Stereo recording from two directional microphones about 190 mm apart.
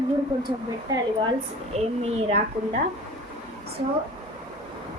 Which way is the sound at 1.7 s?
35° right (ahead or behind).